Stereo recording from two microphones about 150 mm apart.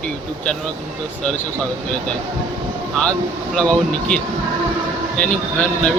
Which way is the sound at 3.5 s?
5° left (ahead or behind).